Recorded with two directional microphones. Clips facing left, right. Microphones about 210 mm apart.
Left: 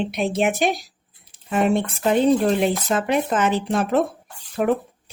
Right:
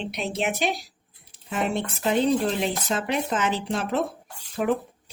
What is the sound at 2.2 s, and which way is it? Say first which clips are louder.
Speech: left 6 dB; 50° left (ahead or behind).